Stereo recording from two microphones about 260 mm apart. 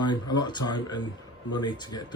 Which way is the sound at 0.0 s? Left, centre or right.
Centre.